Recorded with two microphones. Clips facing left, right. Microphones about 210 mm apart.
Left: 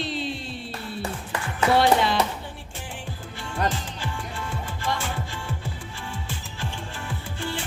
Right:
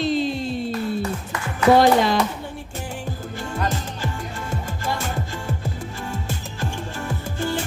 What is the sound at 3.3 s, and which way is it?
Music, 40° right (ahead or behind).